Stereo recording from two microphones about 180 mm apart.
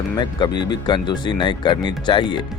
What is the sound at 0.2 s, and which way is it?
Speech, 25° left (ahead or behind).